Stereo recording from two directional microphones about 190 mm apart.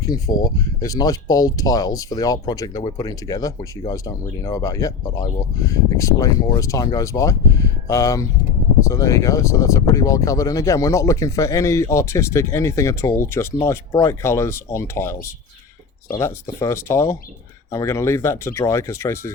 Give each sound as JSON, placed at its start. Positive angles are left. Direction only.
{"t": 0.0, "sound": "speech", "side_deg": 20}